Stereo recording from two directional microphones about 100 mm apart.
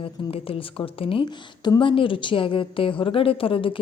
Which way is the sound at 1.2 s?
50° left (ahead or behind).